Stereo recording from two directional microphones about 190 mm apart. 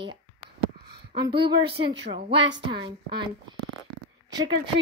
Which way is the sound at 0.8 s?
60° right (ahead or behind).